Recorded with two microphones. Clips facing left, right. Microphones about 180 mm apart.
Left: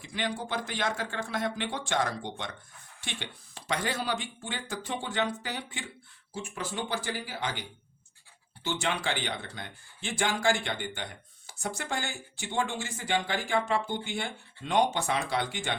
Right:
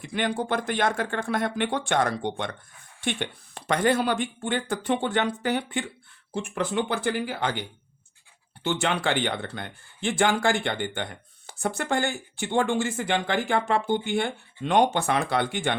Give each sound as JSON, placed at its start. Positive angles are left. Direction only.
{"t": 0.0, "sound": "speech", "side_deg": -55}
{"t": 8.6, "sound": "speech", "side_deg": -60}